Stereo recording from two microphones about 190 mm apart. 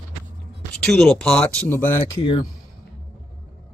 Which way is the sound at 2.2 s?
25° left (ahead or behind).